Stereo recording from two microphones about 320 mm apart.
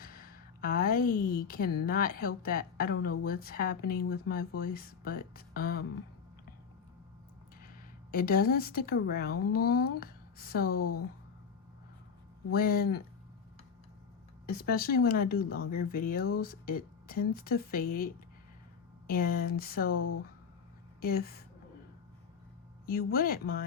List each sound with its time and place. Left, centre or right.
0.0 s a sound: left
1.5 s a woman's voice: left
8.1 s a woman's voice: left
12.5 s a woman's voice: left
14.5 s a woman's voice: left
19.0 s a woman's voice: left
21.0 s a woman's voice: left
22.9 s a woman's voice: left